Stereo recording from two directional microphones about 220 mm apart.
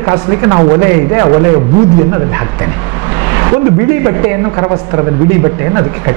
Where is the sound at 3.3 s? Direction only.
15° right (ahead or behind).